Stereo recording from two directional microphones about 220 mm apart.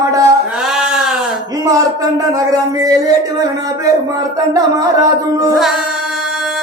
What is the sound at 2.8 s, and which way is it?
Music, 15° right (ahead or behind).